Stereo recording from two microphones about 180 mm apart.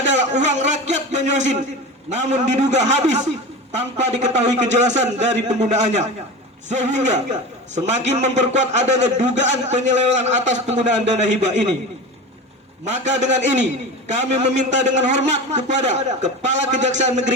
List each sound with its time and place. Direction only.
0.2 s a man's voice: 40° right (ahead or behind)
12.8 s a man's voice: 40° right (ahead or behind)